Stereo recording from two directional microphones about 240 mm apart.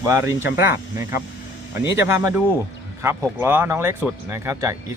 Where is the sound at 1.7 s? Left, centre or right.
Left.